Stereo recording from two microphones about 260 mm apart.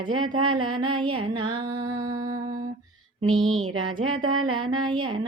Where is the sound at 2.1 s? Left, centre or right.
Centre.